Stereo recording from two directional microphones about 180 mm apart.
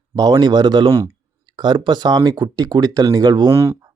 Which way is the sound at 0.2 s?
20° right (ahead or behind).